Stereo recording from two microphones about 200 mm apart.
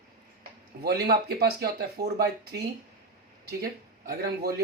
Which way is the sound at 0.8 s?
50° right (ahead or behind).